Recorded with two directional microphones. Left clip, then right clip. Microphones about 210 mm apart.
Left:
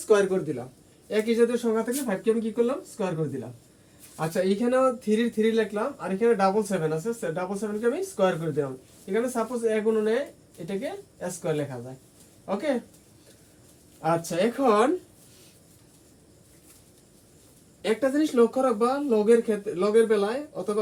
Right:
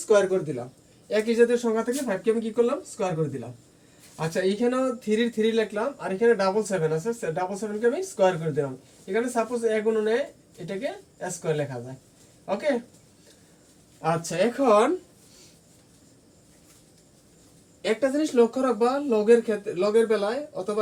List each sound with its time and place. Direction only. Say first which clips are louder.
0.1 s a man's voice: right 1 dB; 20° left (ahead or behind)
4.2 s speech: right 1 dB; 15° left (ahead or behind)
14.0 s speech: even; 15° left (ahead or behind)
17.8 s speech: even; 15° left (ahead or behind)